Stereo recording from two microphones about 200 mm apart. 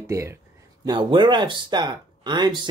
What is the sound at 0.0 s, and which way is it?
Speech, 15° right (ahead or behind).